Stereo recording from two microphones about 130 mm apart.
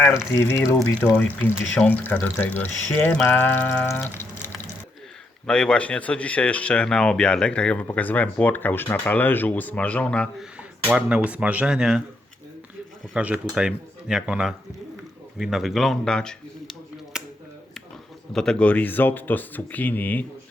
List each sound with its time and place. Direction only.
0.0 s speech: 5° right (ahead or behind)
0.3 s speech: 20° left (ahead or behind)
5.5 s speech: 5° left (ahead or behind)
10.6 s speech: 5° right (ahead or behind)
13.1 s speech: 10° right (ahead or behind)
17.1 s a sound: 5° right (ahead or behind)
18.3 s speech: 10° left (ahead or behind)